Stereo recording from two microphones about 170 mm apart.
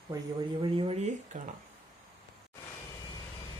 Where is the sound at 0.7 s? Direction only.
35° right (ahead or behind).